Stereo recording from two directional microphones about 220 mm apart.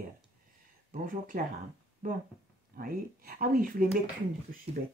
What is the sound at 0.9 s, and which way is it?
Speech, 35° right (ahead or behind).